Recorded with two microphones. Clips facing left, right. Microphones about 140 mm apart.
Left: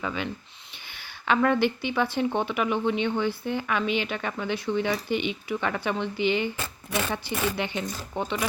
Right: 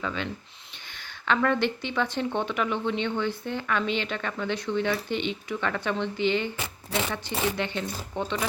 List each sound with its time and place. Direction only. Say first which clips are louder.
0.0 s speech: left 1 dB; 10° left (ahead or behind)
6.6 s speech: even; 20° right (ahead or behind)
7.5 s speech: even; 15° left (ahead or behind)